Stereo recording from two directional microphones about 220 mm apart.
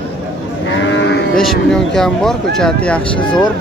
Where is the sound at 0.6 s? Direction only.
55° left (ahead or behind).